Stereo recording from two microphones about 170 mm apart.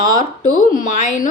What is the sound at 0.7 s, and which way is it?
Speech, 50° left (ahead or behind).